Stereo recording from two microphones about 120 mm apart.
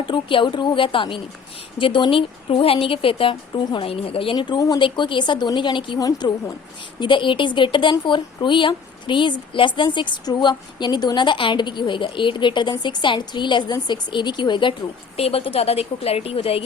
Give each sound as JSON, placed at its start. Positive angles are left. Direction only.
{"t": 0.0, "sound": "speech", "side_deg": 45}